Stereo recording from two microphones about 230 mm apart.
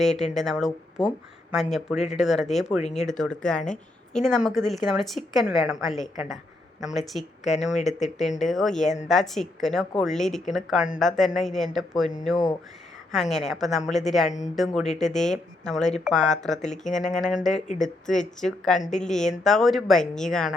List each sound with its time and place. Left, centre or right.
0.0 s speech: centre
7.4 s speech: left
8.4 s speech: centre
13.1 s speech: centre
14.3 s speech: left
14.5 s speech: centre